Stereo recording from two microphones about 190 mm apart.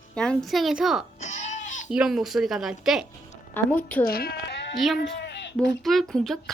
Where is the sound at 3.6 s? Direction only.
10° left (ahead or behind).